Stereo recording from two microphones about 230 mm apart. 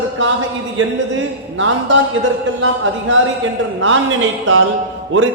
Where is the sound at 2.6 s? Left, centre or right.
Right.